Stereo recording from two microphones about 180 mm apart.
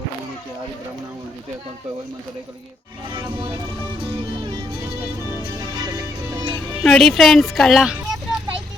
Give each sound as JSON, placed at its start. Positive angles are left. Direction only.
{"t": 3.1, "sound": "speech", "side_deg": -25}
{"t": 4.4, "sound": "music", "side_deg": -25}
{"t": 6.8, "sound": "speech", "side_deg": 0}